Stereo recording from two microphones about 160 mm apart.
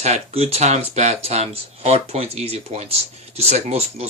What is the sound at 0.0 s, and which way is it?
Speech, 40° right (ahead or behind).